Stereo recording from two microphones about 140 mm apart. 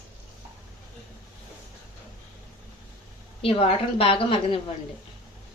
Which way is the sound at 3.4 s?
45° left (ahead or behind).